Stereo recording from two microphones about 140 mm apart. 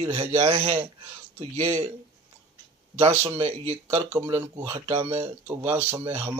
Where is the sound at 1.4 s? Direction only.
50° right (ahead or behind).